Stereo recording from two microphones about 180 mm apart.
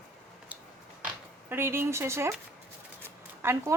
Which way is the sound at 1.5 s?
15° right (ahead or behind).